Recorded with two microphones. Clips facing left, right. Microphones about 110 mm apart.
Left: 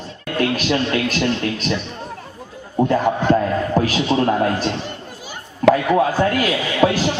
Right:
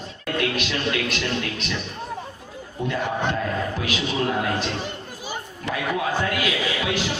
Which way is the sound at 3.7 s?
40° left (ahead or behind).